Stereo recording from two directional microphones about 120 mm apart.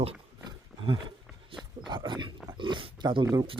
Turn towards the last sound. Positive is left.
turn(degrees=-30)  # may be behind; listen again after turning